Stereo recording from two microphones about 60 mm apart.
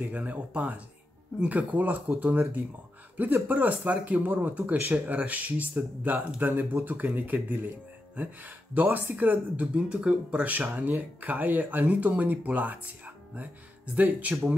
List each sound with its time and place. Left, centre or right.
0.0 s speech: right